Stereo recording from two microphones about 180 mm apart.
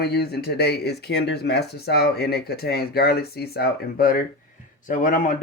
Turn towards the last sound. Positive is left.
turn(degrees=50)  # may be behind; listen again after turning